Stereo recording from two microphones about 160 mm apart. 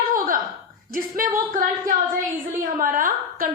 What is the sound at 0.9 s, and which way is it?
A woman's voice, 60° right (ahead or behind).